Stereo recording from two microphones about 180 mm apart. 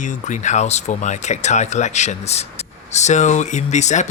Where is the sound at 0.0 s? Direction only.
40° left (ahead or behind).